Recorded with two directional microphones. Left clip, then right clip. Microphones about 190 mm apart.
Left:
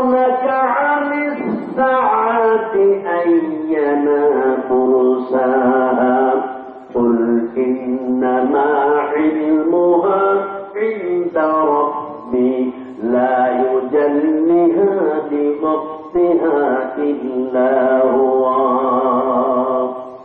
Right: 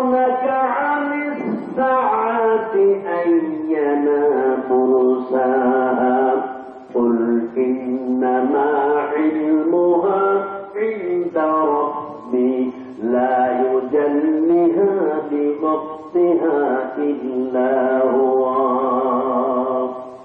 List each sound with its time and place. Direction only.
0.0 s a sound: 15° right (ahead or behind)
5.3 s mantra: 15° right (ahead or behind)
8.2 s music: 15° right (ahead or behind)
9.9 s mantra: 15° right (ahead or behind)
11.3 s music: 15° right (ahead or behind)
13.1 s chant: 10° right (ahead or behind)
15.6 s a sound: 15° right (ahead or behind)
18.3 s music: 15° right (ahead or behind)